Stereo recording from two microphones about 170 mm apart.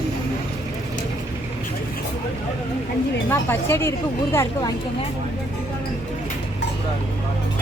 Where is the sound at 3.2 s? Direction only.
15° left (ahead or behind).